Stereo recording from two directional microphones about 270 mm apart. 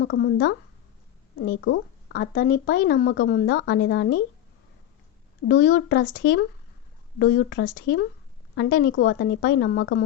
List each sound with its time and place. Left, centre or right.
0.0 s speech: left
5.5 s speech: left